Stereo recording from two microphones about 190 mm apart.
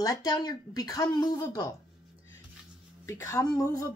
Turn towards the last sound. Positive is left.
turn(degrees=20)  # may be behind; listen again after turning